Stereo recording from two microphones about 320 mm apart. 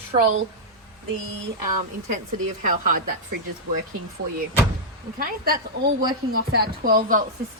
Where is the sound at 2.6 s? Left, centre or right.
Right.